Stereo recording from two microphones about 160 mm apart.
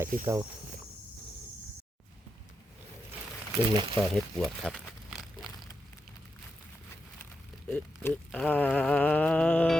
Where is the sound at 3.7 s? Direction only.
35° right (ahead or behind).